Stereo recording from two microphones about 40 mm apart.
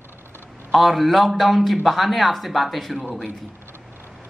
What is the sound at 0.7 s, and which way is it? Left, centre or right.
A man's voice, centre.